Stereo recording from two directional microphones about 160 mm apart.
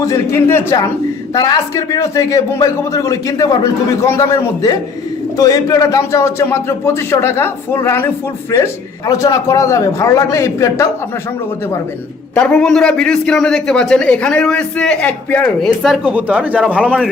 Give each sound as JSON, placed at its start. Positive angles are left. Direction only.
{"t": 0.0, "sound": "speech", "side_deg": 20}
{"t": 12.4, "sound": "a man's voice", "side_deg": 5}